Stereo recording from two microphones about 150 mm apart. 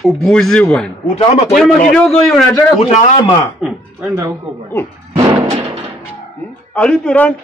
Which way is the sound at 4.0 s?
20° right (ahead or behind).